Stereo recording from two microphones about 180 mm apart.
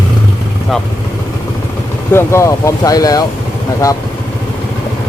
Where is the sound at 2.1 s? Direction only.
15° left (ahead or behind).